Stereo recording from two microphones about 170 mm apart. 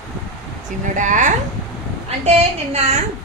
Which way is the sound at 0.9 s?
45° right (ahead or behind).